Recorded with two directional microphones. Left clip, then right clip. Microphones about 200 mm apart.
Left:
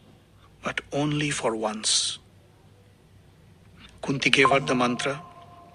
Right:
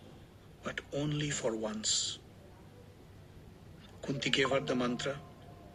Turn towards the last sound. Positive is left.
turn(degrees=40)  # may be behind; listen again after turning